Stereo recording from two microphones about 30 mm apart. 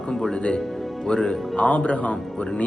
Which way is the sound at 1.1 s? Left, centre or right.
Left.